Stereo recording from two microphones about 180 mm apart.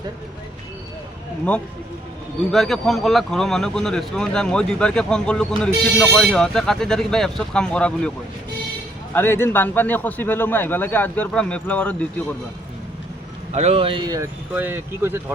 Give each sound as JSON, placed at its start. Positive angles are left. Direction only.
{"t": 2.5, "sound": "speech", "side_deg": 0}
{"t": 9.1, "sound": "a man's voice", "side_deg": 15}
{"t": 13.5, "sound": "speech", "side_deg": -35}